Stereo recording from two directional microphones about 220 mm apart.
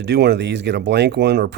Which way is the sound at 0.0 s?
50° right (ahead or behind).